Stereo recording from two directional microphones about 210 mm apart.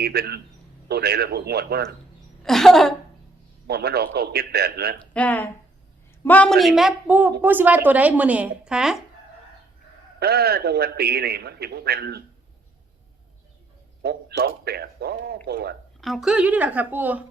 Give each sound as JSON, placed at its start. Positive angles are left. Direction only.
{"t": 0.0, "sound": "a man's voice", "side_deg": -50}
{"t": 2.4, "sound": "speech", "side_deg": 0}
{"t": 3.7, "sound": "a man's voice", "side_deg": -50}
{"t": 5.1, "sound": "speech", "side_deg": 5}
{"t": 10.2, "sound": "a man's voice", "side_deg": -50}
{"t": 14.0, "sound": "a man's voice", "side_deg": -50}
{"t": 16.0, "sound": "speech", "side_deg": 0}